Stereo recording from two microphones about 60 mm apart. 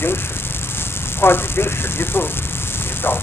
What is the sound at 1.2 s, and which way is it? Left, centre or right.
Speech, left.